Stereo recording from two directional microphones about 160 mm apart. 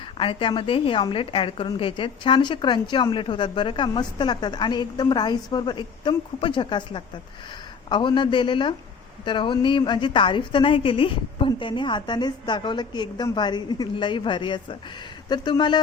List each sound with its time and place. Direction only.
0.2 s a woman's voice: 30° left (ahead or behind)